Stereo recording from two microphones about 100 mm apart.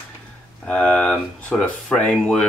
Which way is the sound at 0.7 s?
15° left (ahead or behind).